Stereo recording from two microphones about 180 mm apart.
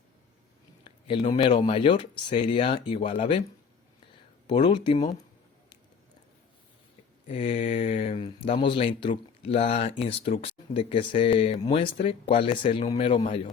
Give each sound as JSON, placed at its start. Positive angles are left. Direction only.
{"t": 0.9, "sound": "speech", "side_deg": 30}
{"t": 4.4, "sound": "speech", "side_deg": 25}
{"t": 7.3, "sound": "mantra", "side_deg": 30}
{"t": 7.5, "sound": "speech", "side_deg": 45}